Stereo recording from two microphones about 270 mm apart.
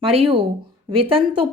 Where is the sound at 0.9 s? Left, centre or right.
Centre.